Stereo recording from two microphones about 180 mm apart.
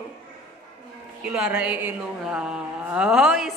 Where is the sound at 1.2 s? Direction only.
5° right (ahead or behind).